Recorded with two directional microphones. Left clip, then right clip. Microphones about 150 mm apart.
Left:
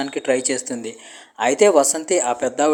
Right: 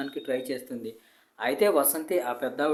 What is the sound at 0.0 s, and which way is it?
Speech, 40° left (ahead or behind).